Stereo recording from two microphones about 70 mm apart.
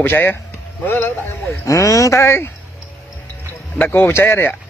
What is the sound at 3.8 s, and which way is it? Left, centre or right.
Speech, left.